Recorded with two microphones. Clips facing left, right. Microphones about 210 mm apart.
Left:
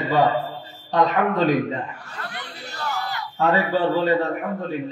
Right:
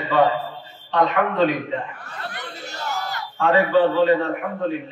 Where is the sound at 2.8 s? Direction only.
45° right (ahead or behind).